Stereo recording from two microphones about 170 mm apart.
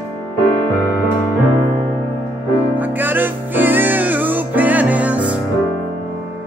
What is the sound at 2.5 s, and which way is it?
Music, 10° right (ahead or behind).